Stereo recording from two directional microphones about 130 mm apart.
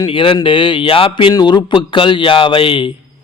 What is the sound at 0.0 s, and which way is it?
Speech, 40° left (ahead or behind).